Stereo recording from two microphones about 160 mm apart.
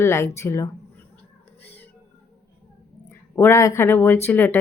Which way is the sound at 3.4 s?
15° left (ahead or behind).